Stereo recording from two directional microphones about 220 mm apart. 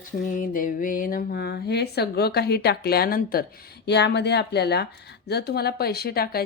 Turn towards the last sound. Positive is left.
turn(degrees=45)  # may be behind; listen again after turning